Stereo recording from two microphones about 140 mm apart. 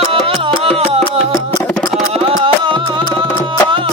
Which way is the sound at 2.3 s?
35° right (ahead or behind).